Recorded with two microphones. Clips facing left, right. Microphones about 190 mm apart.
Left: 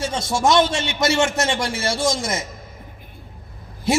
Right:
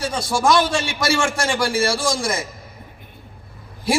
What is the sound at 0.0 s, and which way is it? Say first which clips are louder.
A man's voice: even; 25° left (ahead or behind).